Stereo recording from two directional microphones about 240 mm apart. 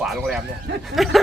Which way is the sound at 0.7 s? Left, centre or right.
Right.